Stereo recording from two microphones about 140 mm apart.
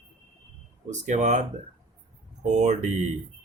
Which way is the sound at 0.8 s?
55° right (ahead or behind).